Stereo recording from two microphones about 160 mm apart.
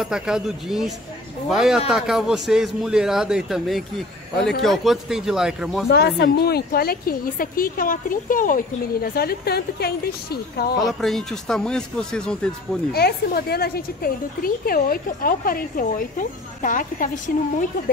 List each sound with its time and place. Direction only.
0.0 s a man's voice: 5° right (ahead or behind)
5.9 s a woman's voice: 90° left
10.9 s a man's voice: centre (ahead or behind)
12.9 s a woman's voice: 80° left; by 17.9 s 55° left (ahead or behind)